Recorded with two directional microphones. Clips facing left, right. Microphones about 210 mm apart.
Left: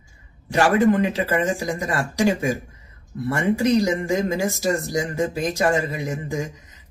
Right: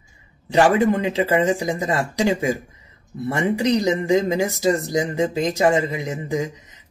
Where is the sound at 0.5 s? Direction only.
20° right (ahead or behind).